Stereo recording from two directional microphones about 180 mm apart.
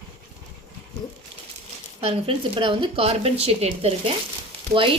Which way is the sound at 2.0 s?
30° right (ahead or behind).